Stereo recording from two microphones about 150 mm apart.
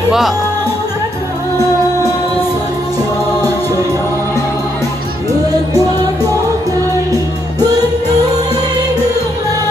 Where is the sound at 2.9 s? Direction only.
15° left (ahead or behind).